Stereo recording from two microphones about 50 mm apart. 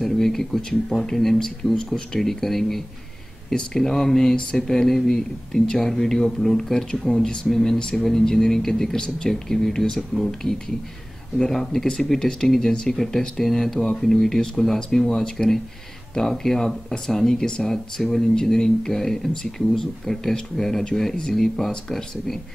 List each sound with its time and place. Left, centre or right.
0.0 s speech: centre